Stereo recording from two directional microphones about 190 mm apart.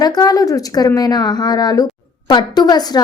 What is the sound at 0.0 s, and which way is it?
Speech, 20° left (ahead or behind).